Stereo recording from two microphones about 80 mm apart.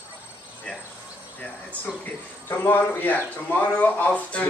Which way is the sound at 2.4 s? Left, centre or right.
Left.